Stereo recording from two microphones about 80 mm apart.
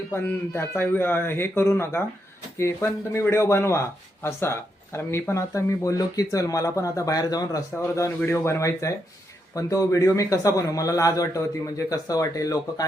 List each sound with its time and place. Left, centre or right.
0.1 s a man's voice: left